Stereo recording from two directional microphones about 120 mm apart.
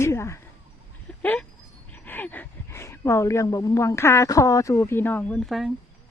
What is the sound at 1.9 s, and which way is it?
Speech, 15° left (ahead or behind).